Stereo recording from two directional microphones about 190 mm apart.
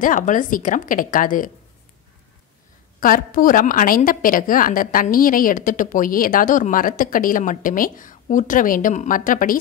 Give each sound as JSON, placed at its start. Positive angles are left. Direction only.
{"t": 0.0, "sound": "a woman's voice", "side_deg": 45}
{"t": 3.0, "sound": "a woman's voice", "side_deg": 45}